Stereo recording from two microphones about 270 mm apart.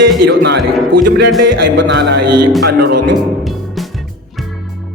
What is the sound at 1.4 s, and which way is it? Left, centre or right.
Speech, right.